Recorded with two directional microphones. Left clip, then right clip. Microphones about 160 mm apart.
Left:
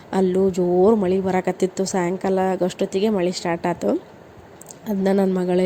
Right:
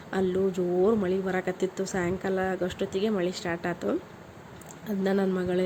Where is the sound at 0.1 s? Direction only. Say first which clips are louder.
Left 8 dB; 35° left (ahead or behind).